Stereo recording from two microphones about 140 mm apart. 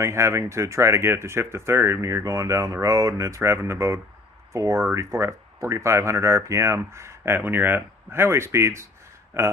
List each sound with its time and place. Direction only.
0.0 s speech: 20° right (ahead or behind)